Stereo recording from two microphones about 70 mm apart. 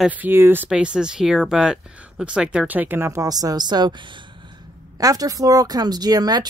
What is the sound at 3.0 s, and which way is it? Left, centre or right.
Speech, right.